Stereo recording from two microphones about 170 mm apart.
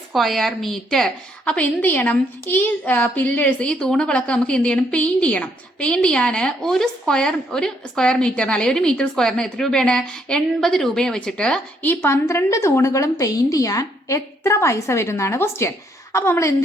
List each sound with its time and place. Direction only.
0.1 s a woman's voice: centre (ahead or behind); by 16.6 s 15° left (ahead or behind)